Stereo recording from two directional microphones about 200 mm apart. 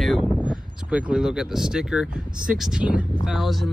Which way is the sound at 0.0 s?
Centre (ahead or behind).